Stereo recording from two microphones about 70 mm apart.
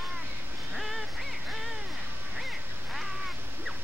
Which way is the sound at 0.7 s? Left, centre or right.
Centre.